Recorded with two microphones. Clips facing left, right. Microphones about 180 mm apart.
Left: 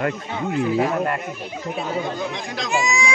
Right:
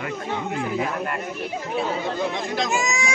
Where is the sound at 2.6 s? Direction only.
45° right (ahead or behind).